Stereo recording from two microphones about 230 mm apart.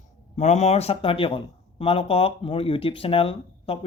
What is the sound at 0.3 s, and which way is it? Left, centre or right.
Speech, left.